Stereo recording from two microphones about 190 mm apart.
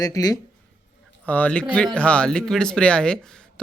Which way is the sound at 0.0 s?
20° left (ahead or behind).